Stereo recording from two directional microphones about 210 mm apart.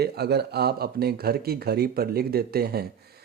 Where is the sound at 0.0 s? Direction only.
50° right (ahead or behind).